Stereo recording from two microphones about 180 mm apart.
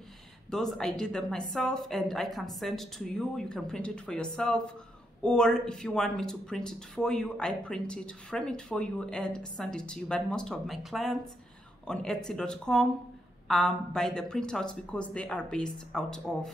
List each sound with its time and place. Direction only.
0.5 s speech: 5° left (ahead or behind)